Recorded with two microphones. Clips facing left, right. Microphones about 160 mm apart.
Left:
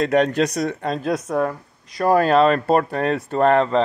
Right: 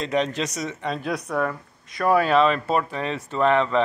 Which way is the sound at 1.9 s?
35° left (ahead or behind).